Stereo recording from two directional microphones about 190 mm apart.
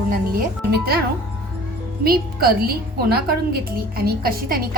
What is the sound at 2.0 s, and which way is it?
A woman's voice, 50° right (ahead or behind).